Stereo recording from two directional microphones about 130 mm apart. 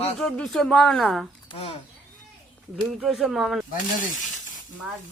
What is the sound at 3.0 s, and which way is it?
Speech, centre (ahead or behind).